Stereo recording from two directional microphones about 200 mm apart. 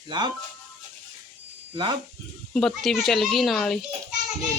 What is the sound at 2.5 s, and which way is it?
Speech, centre (ahead or behind).